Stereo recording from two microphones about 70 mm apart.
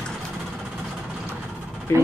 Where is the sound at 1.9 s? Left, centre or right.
Left.